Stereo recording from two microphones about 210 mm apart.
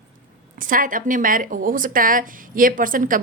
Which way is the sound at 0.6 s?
40° right (ahead or behind).